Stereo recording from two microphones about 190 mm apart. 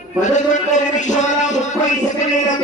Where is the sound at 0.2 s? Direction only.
40° left (ahead or behind).